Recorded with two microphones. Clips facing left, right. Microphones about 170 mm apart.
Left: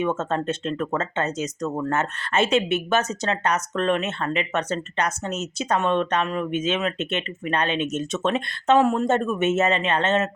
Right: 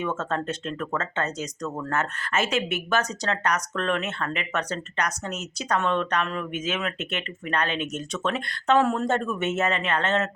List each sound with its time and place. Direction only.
0.0 s speech: 20° left (ahead or behind)